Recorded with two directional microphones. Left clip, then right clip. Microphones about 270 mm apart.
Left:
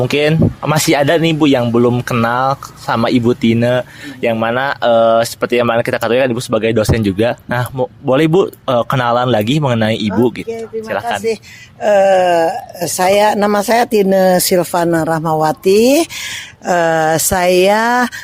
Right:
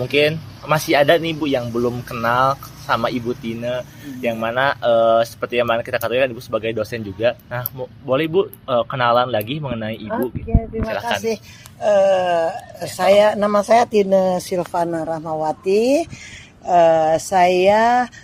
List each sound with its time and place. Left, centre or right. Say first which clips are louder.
0.0 s speech: left 4 dB; left
10.8 s speech: left 5 dB; left
11.8 s speech: left 5 dB; left